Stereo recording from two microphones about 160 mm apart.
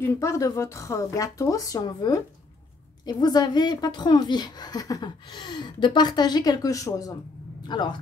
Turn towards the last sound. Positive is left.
turn(degrees=30)  # may be behind; listen again after turning